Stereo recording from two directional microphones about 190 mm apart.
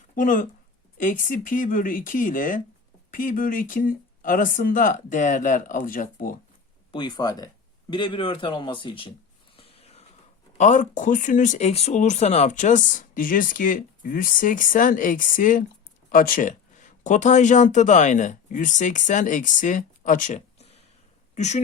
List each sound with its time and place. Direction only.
0.2 s speech: 45° left (ahead or behind)
6.9 s speech: 20° left (ahead or behind)
9.6 s a sound: 30° left (ahead or behind)
10.6 s speech: 40° left (ahead or behind)